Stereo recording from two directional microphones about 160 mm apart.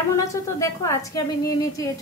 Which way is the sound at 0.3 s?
20° left (ahead or behind).